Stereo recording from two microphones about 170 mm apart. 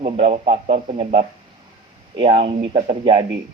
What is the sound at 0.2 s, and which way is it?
Speech, 35° right (ahead or behind).